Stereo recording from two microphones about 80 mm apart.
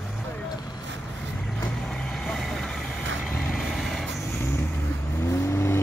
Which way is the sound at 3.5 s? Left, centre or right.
Centre.